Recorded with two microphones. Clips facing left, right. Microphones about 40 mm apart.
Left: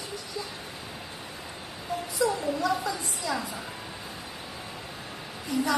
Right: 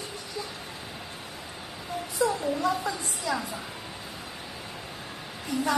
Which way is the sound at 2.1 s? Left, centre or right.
Right.